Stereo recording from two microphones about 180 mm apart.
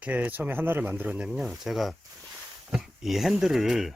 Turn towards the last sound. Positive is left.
turn(degrees=0)  # may be behind; listen again after turning